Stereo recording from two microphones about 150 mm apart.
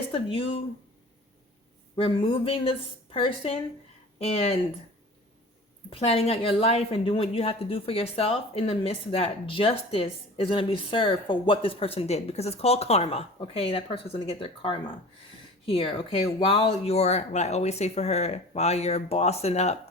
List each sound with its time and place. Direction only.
0.1 s a woman's voice: 40° left (ahead or behind)
2.0 s a woman's voice: 35° left (ahead or behind)
5.9 s a woman's voice: 40° left (ahead or behind)